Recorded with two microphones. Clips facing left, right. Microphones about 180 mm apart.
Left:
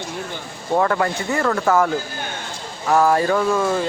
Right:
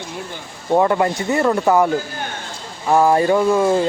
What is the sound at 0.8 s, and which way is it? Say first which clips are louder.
Speech: right 3 dB; 15° right (ahead or behind).